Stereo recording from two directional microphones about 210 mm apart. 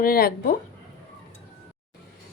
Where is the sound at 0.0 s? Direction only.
45° left (ahead or behind).